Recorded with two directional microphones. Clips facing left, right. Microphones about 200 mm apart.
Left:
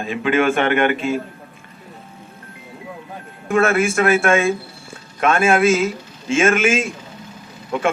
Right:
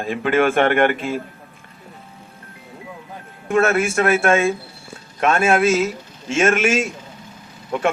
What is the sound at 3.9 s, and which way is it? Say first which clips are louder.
A man's voice: left 1 dB; 40° right (ahead or behind).